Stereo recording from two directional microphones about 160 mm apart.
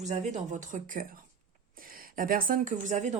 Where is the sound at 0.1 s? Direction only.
45° right (ahead or behind).